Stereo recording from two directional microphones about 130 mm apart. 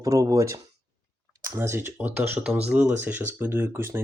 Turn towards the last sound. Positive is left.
turn(degrees=-20)  # may be behind; listen again after turning